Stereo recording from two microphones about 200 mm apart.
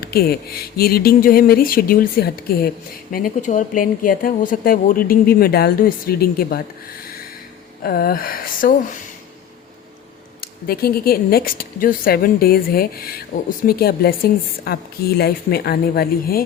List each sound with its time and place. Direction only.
0.0 s speech: 50° left (ahead or behind)
7.9 s speech: 50° left (ahead or behind)
10.4 s speech: 50° left (ahead or behind)